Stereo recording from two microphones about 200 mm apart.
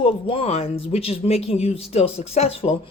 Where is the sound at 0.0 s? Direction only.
30° left (ahead or behind).